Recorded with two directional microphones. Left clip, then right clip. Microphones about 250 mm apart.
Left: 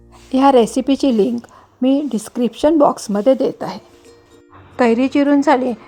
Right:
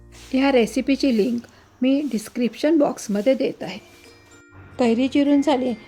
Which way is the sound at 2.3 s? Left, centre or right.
Left.